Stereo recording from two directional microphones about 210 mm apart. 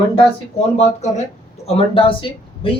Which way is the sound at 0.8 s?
30° left (ahead or behind).